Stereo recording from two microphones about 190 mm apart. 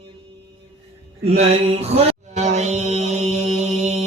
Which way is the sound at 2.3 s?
35° right (ahead or behind).